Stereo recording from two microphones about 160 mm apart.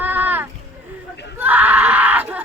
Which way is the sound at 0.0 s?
10° right (ahead or behind).